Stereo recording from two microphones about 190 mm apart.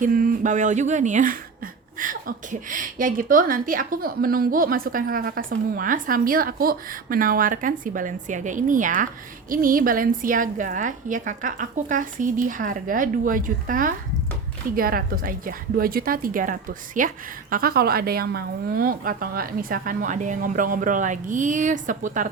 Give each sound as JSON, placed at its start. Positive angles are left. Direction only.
{"t": 0.0, "sound": "speech", "side_deg": -50}